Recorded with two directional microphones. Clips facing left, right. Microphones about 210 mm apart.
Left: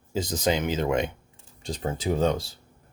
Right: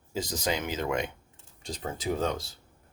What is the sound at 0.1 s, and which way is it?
Speech, 25° left (ahead or behind).